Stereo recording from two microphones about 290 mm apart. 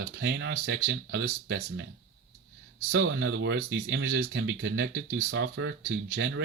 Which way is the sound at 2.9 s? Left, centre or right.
Right.